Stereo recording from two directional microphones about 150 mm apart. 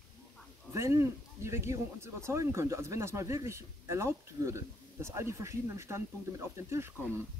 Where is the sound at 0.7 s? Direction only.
20° right (ahead or behind).